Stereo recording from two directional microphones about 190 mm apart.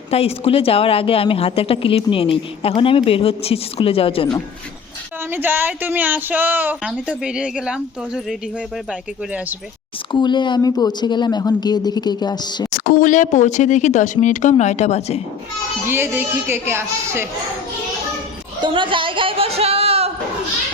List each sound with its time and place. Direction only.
0.1 s a woman's voice: 30° left (ahead or behind)
5.3 s a woman's voice: 10° right (ahead or behind)
10.1 s a woman's voice: 25° left (ahead or behind)
12.7 s speech: 50° left (ahead or behind)
15.9 s a woman's voice: 10° right (ahead or behind)
18.6 s speech: 25° right (ahead or behind)